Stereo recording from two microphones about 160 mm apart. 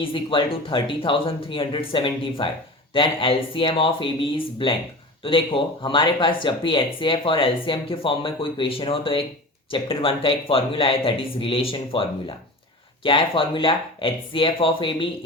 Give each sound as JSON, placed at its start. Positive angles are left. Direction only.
{"t": 0.0, "sound": "speech", "side_deg": 35}